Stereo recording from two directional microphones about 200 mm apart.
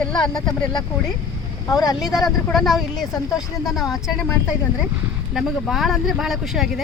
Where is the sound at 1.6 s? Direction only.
20° left (ahead or behind).